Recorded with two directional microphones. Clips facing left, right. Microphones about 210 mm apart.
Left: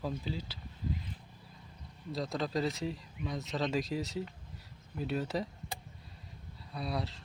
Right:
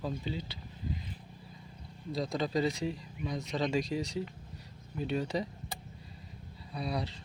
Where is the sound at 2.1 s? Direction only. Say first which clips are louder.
Right 2 dB; centre (ahead or behind).